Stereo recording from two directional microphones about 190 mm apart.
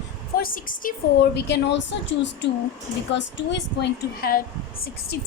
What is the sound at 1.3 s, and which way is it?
A woman's voice, 65° left (ahead or behind).